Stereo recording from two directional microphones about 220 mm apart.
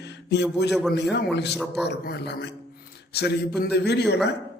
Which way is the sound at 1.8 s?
50° left (ahead or behind).